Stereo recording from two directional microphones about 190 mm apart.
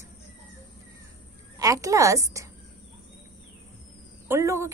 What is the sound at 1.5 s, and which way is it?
Speech, 15° right (ahead or behind).